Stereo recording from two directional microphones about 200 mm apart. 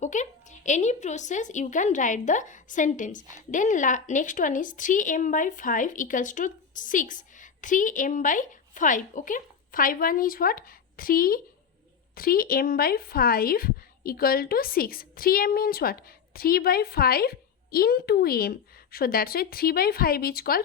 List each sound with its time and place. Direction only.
0.0 s a woman's voice: 35° left (ahead or behind)